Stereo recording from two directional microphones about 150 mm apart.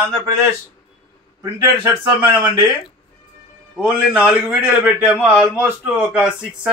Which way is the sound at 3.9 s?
10° right (ahead or behind).